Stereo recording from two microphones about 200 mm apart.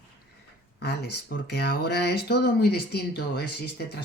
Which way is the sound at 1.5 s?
55° left (ahead or behind).